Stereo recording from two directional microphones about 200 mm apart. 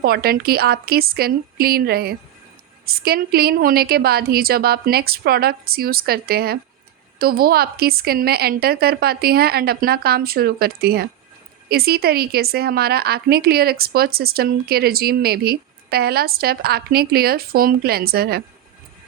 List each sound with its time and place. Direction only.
0.0 s a woman's voice: 50° right (ahead or behind)